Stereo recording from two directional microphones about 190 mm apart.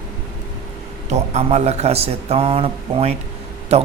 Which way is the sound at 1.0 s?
35° right (ahead or behind).